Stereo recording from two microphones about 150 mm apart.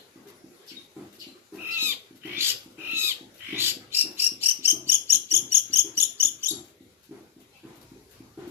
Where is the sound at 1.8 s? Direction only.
15° right (ahead or behind).